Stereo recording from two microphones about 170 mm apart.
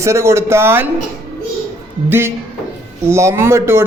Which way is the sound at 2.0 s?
15° right (ahead or behind).